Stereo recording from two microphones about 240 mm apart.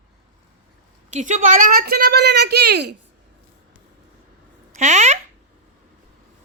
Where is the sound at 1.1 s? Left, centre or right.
Right.